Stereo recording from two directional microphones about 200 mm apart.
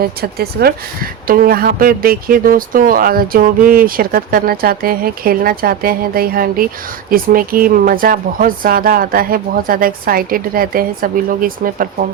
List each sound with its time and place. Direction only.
0.0 s speech: 50° right (ahead or behind)